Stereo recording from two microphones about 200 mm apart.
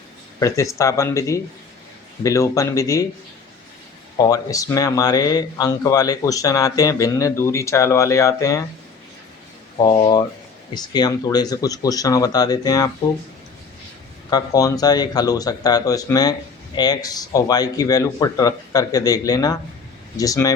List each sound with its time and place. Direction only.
0.3 s speech: 15° left (ahead or behind)
4.2 s speech: 15° left (ahead or behind)
9.7 s speech: 25° left (ahead or behind)
14.3 s speech: 20° left (ahead or behind)